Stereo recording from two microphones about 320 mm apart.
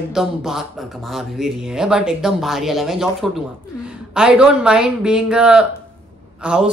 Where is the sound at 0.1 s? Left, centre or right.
Centre.